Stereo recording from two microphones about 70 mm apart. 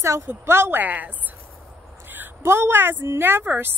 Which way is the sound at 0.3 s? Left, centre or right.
Right.